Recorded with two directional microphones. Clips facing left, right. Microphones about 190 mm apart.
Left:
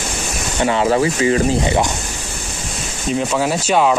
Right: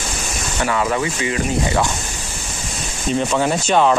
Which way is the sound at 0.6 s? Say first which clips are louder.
Left 5 dB; 25° left (ahead or behind).